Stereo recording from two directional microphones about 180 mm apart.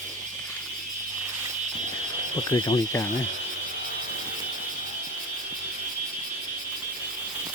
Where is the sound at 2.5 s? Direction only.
25° left (ahead or behind).